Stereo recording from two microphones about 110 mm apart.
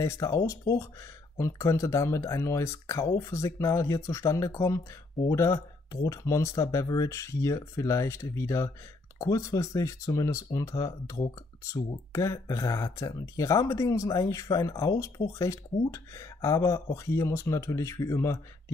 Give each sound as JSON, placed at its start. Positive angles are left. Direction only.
{"t": 0.0, "sound": "speech", "side_deg": 30}